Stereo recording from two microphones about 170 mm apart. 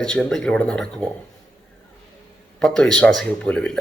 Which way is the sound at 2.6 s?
5° left (ahead or behind).